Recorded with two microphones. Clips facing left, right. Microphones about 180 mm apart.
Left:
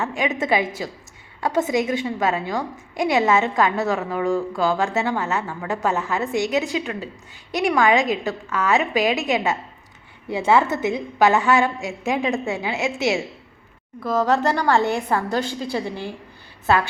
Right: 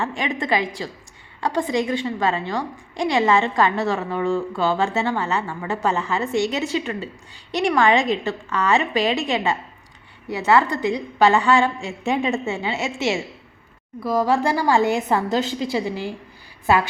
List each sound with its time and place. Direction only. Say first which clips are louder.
0.0 s a woman's voice: left 2 dB; centre (ahead or behind); by 16.9 s 15° right (ahead or behind)